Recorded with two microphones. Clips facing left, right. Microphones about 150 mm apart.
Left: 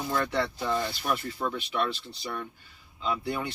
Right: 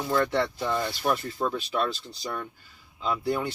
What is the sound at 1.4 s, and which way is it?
Speech, 35° right (ahead or behind).